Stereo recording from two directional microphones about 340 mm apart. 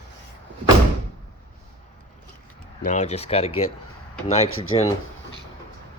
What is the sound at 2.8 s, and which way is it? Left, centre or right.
Speech, centre.